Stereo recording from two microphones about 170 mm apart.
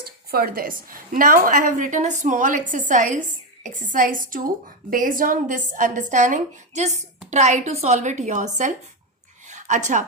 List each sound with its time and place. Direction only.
0.0 s a woman's voice: 65° right (ahead or behind); by 8.4 s 45° right (ahead or behind)
9.5 s a woman's voice: 45° right (ahead or behind)